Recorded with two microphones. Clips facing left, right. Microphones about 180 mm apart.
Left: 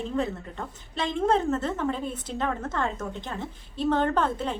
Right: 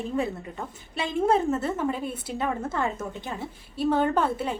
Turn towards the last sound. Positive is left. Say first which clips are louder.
# right 1 dB
turn(degrees=-10)  # may be behind; listen again after turning